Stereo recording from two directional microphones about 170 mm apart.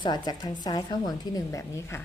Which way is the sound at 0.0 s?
25° left (ahead or behind).